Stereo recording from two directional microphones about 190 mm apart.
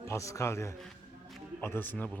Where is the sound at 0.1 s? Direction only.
15° left (ahead or behind).